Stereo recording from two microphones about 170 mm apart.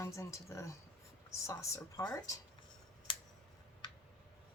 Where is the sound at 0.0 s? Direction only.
15° left (ahead or behind).